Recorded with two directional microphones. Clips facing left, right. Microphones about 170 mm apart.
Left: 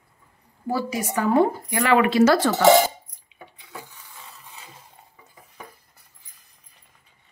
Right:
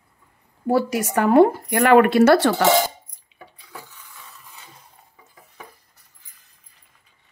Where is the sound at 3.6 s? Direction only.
20° left (ahead or behind).